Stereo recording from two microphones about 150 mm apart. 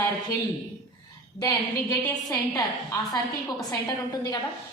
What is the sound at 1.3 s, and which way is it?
A woman's voice, 25° left (ahead or behind).